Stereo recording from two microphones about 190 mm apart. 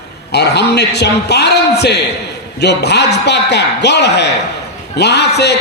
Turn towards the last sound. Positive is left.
turn(degrees=60)  # may be behind; listen again after turning